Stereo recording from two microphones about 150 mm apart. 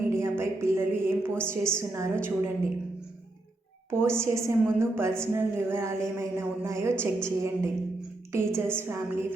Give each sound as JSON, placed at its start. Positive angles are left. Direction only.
{"t": 0.1, "sound": "a woman's voice", "side_deg": -20}
{"t": 3.9, "sound": "a woman's voice", "side_deg": -15}